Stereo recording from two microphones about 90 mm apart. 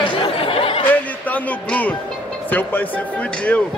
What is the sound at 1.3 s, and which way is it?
Speech, 15° left (ahead or behind).